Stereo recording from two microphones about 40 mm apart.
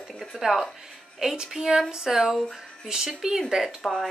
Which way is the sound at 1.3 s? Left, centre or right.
Centre.